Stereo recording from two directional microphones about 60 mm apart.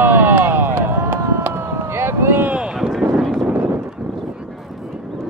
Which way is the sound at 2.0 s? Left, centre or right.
Right.